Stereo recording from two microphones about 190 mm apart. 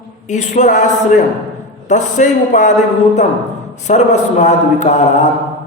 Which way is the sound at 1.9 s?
40° left (ahead or behind).